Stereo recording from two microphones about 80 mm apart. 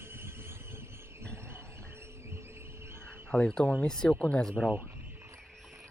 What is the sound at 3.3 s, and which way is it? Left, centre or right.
Speech, centre.